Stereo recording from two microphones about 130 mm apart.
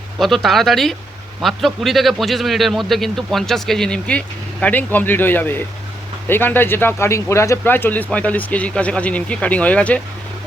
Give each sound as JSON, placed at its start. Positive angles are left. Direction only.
{"t": 0.2, "sound": "a man's voice", "side_deg": 0}